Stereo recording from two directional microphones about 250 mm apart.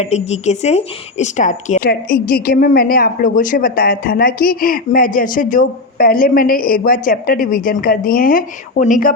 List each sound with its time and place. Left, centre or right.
0.0 s speech: left